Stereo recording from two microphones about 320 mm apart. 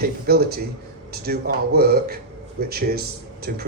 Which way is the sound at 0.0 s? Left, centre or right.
Right.